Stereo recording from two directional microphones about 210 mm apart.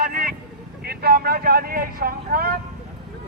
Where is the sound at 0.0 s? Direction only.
40° right (ahead or behind).